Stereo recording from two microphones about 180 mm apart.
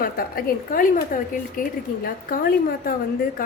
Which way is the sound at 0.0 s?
55° left (ahead or behind).